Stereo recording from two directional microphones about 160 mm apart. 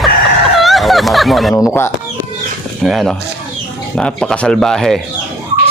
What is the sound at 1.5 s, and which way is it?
Speech, 20° left (ahead or behind).